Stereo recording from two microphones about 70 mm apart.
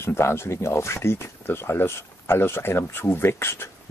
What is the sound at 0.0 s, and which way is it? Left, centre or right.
Speech, left.